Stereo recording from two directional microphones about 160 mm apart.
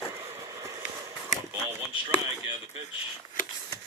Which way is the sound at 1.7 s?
35° right (ahead or behind).